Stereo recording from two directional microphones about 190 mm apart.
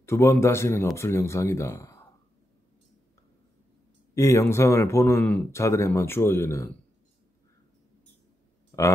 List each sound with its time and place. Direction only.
0.0 s speech: 15° left (ahead or behind)
4.1 s speech: 15° left (ahead or behind)
8.7 s grunt: 15° left (ahead or behind)